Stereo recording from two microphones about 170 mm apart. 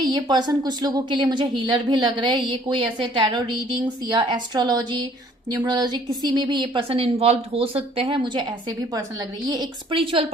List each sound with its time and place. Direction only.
0.0 s a woman's voice: 25° right (ahead or behind)